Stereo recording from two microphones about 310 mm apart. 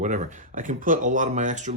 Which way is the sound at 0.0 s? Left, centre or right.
Right.